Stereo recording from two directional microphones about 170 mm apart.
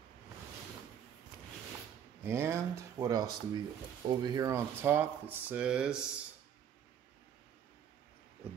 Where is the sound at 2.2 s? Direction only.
15° right (ahead or behind).